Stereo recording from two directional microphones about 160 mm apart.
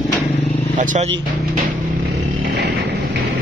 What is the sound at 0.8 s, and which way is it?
Speech, 55° right (ahead or behind).